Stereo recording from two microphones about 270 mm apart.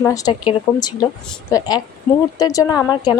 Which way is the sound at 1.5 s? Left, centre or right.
Centre.